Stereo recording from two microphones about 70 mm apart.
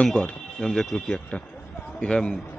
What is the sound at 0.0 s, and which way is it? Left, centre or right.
A man's voice, centre.